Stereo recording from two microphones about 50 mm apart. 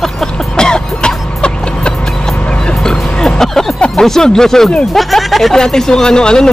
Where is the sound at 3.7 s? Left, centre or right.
Left.